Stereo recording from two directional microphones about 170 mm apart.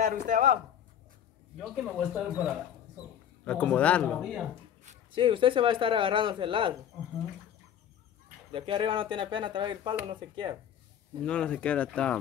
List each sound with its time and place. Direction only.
0.0 s speech: 50° right (ahead or behind)
1.6 s speech: centre (ahead or behind)
3.4 s speech: 10° left (ahead or behind)
5.1 s speech: 30° right (ahead or behind)
8.5 s speech: 30° right (ahead or behind)
11.2 s speech: 5° left (ahead or behind)